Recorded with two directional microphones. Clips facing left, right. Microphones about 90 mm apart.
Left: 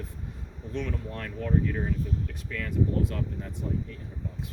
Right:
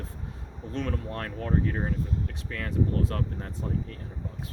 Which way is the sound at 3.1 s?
50° right (ahead or behind).